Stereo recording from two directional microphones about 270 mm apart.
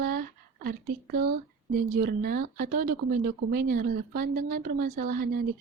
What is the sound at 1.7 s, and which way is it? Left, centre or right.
Speech, right.